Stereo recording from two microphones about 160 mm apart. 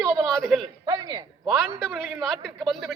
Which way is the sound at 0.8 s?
25° right (ahead or behind).